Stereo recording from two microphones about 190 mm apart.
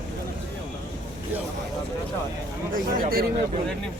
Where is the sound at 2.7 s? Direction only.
50° right (ahead or behind).